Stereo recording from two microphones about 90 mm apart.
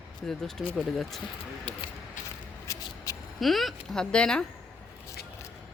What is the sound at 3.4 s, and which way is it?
Speech, centre (ahead or behind).